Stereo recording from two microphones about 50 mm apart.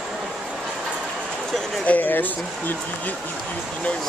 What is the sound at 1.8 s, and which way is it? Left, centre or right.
Speech, left.